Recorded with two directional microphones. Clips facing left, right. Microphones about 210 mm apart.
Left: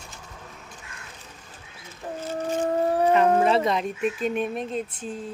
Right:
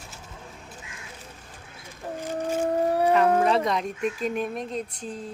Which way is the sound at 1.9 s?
15° right (ahead or behind).